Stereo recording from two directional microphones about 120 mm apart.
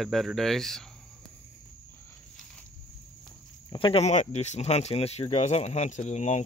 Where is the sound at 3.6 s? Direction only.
45° left (ahead or behind).